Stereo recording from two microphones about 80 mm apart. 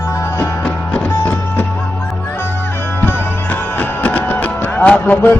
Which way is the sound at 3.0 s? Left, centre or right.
Left.